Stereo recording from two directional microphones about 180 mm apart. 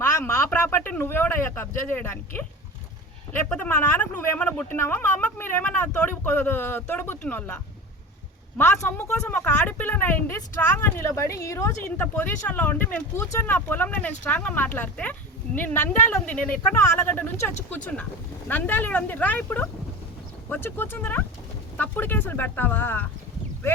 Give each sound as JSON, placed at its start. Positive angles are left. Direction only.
{"t": 0.0, "sound": "speech", "side_deg": 15}
{"t": 3.5, "sound": "speech", "side_deg": 10}